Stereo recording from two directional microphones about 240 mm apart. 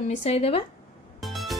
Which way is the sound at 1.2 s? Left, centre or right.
Centre.